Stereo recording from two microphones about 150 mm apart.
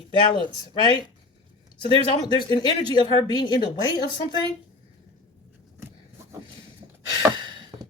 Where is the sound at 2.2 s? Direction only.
30° left (ahead or behind).